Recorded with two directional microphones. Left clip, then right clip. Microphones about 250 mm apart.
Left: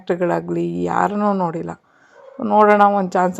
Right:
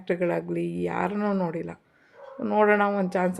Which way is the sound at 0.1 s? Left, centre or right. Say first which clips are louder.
Left 7 dB; centre.